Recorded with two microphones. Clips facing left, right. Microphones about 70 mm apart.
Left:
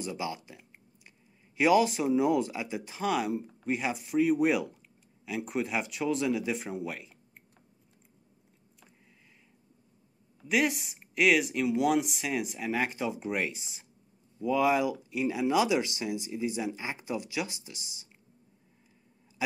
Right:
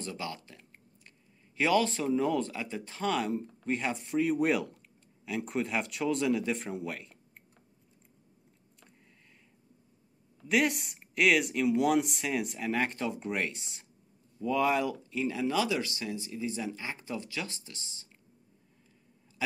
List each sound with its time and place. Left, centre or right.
0.0 s speech: centre
10.4 s speech: centre